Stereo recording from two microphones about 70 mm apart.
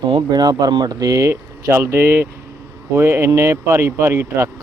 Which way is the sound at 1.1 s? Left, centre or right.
Right.